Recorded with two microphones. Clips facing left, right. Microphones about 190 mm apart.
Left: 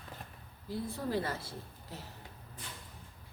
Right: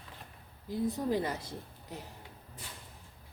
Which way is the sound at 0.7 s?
15° right (ahead or behind).